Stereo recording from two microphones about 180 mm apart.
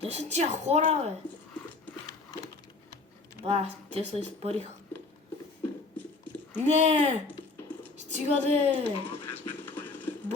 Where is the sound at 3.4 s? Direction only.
35° right (ahead or behind).